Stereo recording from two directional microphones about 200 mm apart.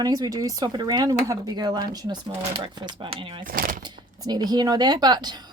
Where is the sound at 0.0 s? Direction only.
20° right (ahead or behind).